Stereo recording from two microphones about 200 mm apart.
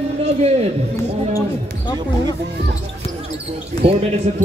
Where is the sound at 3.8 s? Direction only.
30° right (ahead or behind).